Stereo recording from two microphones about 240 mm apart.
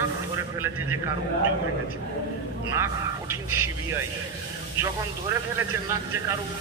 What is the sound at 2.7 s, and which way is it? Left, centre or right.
Speech, centre.